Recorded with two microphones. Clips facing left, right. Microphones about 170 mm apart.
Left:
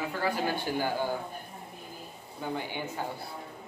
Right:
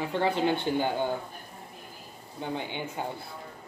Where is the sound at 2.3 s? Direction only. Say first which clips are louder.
Right 1 dB; 20° right (ahead or behind).